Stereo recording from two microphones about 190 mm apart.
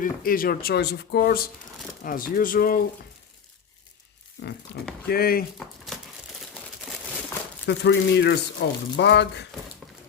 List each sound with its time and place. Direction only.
0.0 s speech: 50° left (ahead or behind)
5.0 s speech: 55° left (ahead or behind)
5.5 s speech: centre (ahead or behind)
7.7 s speech: 65° left (ahead or behind)
8.6 s speech: 80° left
9.0 s speech: 65° left (ahead or behind)